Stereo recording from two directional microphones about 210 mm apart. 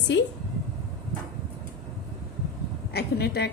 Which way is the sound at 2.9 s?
50° left (ahead or behind).